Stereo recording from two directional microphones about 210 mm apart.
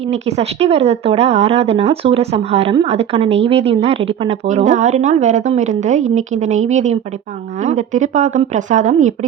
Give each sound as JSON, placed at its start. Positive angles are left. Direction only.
{"t": 0.0, "sound": "a woman's voice", "side_deg": -30}